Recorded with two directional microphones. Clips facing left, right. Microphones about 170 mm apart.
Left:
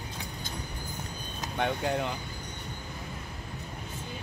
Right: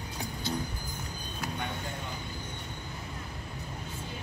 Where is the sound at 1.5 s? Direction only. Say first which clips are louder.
Left 8 dB; 80° left.